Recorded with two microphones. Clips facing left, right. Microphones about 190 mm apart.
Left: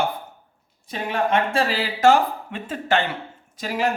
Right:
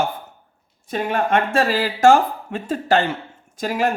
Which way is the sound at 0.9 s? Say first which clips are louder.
Right 2 dB; 50° right (ahead or behind).